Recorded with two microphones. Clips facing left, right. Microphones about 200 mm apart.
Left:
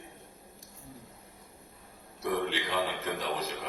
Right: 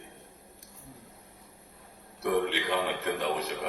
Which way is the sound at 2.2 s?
60° right (ahead or behind).